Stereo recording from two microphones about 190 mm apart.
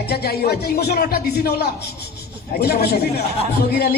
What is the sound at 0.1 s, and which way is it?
A man's voice, 55° left (ahead or behind).